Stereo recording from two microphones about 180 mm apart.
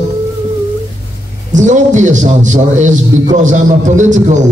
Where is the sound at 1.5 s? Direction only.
40° right (ahead or behind).